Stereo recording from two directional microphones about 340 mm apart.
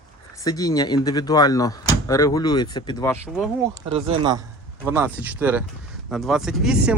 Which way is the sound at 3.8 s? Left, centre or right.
Centre.